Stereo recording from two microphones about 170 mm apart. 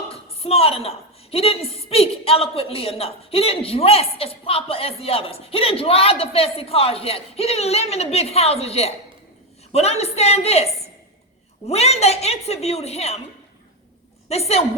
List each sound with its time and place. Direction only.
0.1 s a woman's voice: 35° left (ahead or behind)
11.7 s a woman's voice: 40° left (ahead or behind)
14.3 s a woman's voice: 40° left (ahead or behind)